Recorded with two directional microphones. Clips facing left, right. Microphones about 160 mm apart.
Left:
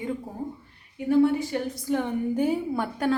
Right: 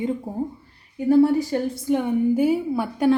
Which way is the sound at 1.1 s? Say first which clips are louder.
Right 4 dB; 35° right (ahead or behind).